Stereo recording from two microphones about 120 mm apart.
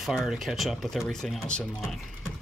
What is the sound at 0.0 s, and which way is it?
Speech, 5° right (ahead or behind).